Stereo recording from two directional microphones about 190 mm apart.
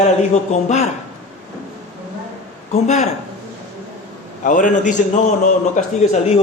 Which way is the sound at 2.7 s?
40° left (ahead or behind).